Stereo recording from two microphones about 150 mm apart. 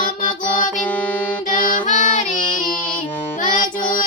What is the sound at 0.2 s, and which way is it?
Music, 60° left (ahead or behind).